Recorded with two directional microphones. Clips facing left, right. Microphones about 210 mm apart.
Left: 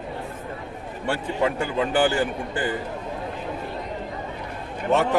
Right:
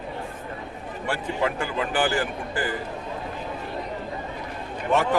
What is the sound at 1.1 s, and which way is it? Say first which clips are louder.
A man's voice: left 2 dB; 25° left (ahead or behind).